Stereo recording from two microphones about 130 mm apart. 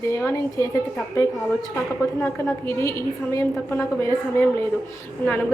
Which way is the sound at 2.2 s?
20° left (ahead or behind).